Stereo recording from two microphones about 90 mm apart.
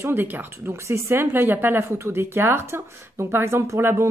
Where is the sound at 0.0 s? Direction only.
25° right (ahead or behind).